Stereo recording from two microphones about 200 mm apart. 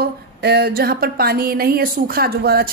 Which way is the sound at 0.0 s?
55° right (ahead or behind).